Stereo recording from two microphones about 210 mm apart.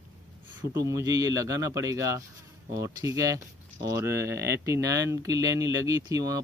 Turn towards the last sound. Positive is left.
turn(degrees=-15)  # may be behind; listen again after turning